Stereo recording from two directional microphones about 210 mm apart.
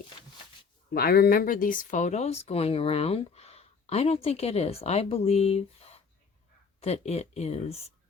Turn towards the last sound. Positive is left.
turn(degrees=30)  # may be behind; listen again after turning